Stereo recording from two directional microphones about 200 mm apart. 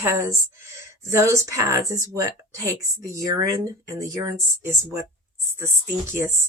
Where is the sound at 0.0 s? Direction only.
15° right (ahead or behind).